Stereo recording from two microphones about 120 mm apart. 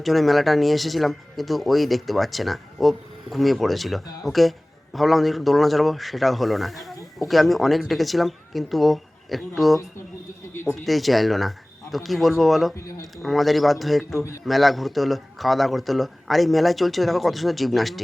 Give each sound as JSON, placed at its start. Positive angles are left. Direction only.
{"t": 0.0, "sound": "speech", "side_deg": 0}
{"t": 12.7, "sound": "speech", "side_deg": 30}
{"t": 13.2, "sound": "speech", "side_deg": 0}